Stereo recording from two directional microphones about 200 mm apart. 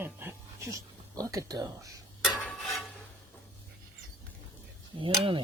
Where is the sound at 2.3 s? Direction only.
5° left (ahead or behind).